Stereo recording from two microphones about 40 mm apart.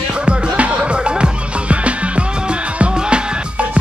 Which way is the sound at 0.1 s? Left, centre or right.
Right.